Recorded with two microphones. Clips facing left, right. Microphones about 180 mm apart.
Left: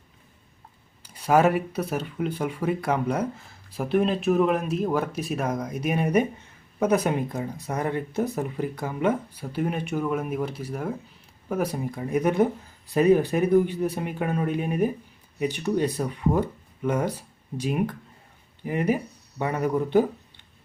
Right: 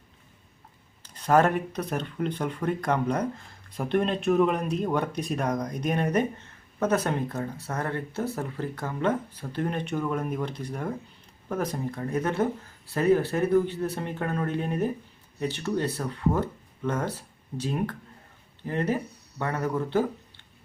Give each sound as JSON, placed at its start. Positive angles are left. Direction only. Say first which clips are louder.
{"t": 1.0, "sound": "a man's voice", "louder": "left 2 dB", "side_deg": 10}